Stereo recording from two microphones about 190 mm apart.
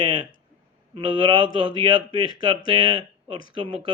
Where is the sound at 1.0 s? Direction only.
25° right (ahead or behind).